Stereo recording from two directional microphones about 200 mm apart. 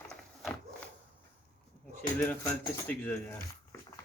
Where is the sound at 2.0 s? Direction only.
10° left (ahead or behind).